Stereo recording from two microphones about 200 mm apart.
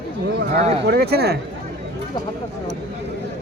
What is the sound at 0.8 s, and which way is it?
Speech, 50° right (ahead or behind).